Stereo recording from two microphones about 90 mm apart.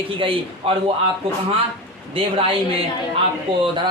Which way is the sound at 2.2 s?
90° right.